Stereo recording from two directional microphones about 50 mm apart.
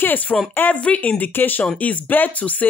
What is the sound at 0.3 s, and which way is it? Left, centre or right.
Speech, left.